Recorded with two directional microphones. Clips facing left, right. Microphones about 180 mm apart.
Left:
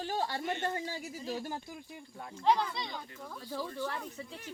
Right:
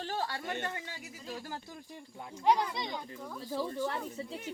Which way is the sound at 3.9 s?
30° right (ahead or behind).